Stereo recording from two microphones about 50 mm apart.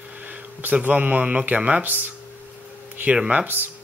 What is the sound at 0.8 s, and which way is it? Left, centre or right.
Speech, right.